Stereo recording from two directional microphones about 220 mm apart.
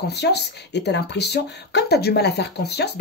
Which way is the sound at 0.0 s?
50° left (ahead or behind).